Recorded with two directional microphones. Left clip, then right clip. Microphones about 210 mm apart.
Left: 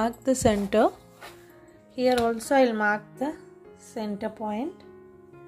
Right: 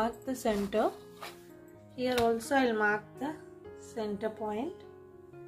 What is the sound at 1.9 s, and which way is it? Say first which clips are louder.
Speech: left 6 dB; 40° left (ahead or behind).